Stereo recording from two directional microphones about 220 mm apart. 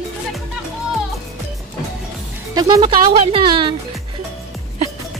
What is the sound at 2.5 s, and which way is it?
Speech, 20° right (ahead or behind).